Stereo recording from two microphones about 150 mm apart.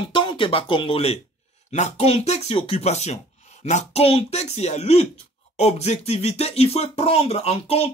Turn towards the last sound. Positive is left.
turn(degrees=40)  # may be behind; listen again after turning